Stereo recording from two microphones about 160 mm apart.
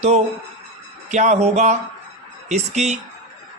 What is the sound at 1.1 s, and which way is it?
Speech, 45° right (ahead or behind).